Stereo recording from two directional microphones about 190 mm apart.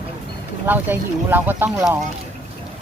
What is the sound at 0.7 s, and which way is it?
Speech, 10° right (ahead or behind).